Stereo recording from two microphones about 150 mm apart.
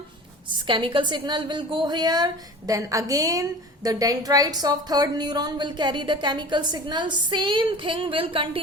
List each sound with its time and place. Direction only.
0.5 s a woman's voice: 35° right (ahead or behind)